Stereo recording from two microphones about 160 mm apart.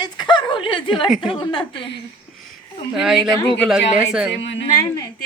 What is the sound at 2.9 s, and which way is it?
Speech, 5° right (ahead or behind).